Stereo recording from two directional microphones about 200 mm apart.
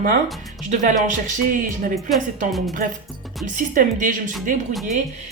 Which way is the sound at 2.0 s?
Centre (ahead or behind).